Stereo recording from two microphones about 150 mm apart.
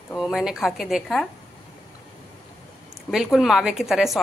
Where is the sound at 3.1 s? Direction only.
Centre (ahead or behind).